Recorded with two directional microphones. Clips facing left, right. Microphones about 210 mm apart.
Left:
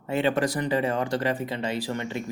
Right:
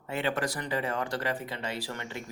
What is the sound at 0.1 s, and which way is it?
Speech, 25° left (ahead or behind).